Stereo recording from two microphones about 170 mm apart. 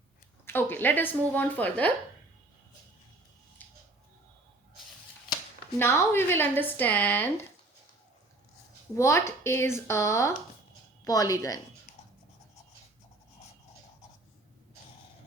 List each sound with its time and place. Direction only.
0.4 s a woman's voice: 10° left (ahead or behind)
3.6 s scissors: 10° left (ahead or behind)
5.8 s a woman's voice: 15° left (ahead or behind)
9.0 s a woman's voice: 15° left (ahead or behind)